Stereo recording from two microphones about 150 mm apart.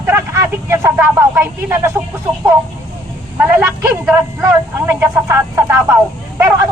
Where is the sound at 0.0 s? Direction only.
15° right (ahead or behind).